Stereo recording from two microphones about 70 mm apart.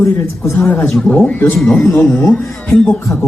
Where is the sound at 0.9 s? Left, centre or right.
Centre.